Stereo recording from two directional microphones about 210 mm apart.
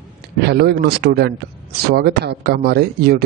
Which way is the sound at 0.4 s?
50° right (ahead or behind).